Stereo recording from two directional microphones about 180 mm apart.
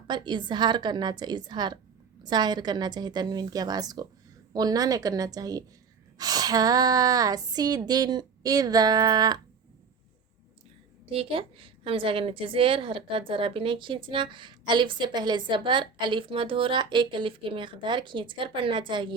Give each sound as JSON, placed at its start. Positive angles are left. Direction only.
{"t": 0.1, "sound": "a woman's voice", "side_deg": -25}
{"t": 11.0, "sound": "a woman's voice", "side_deg": -30}